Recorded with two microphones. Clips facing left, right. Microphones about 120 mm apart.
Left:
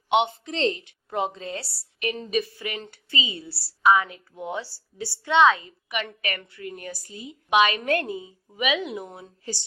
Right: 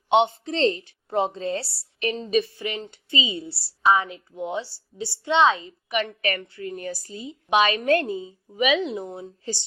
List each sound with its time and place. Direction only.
0.1 s a woman's voice: 30° right (ahead or behind)